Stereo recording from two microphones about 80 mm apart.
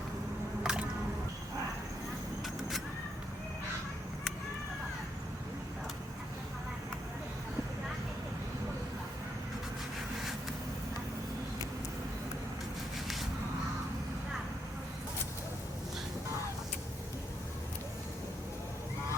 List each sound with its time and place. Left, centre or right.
0.6 s music: centre